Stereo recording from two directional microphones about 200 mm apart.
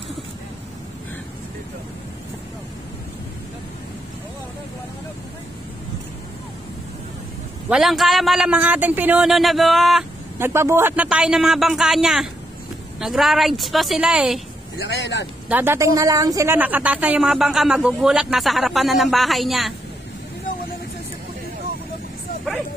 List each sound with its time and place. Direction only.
7.7 s a woman's voice: centre (ahead or behind)
10.4 s a woman's voice: 15° right (ahead or behind)
14.8 s speech: 60° left (ahead or behind)
15.4 s a woman's voice: 10° right (ahead or behind)